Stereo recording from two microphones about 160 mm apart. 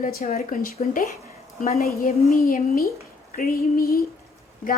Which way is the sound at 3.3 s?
65° left (ahead or behind).